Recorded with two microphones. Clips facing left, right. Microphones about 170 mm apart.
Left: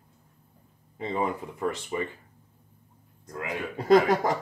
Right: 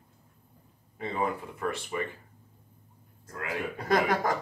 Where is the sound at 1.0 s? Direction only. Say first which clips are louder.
Left 2 dB; 20° left (ahead or behind).